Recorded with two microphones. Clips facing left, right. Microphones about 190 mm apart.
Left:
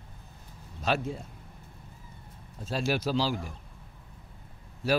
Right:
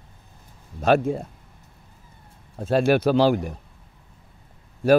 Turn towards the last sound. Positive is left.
turn(degrees=-55)  # may be behind; listen again after turning